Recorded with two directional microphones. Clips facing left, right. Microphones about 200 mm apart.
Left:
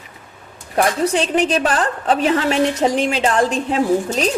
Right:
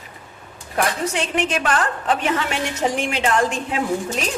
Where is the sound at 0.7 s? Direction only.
35° left (ahead or behind).